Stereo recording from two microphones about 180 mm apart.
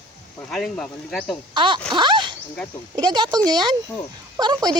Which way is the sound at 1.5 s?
25° right (ahead or behind).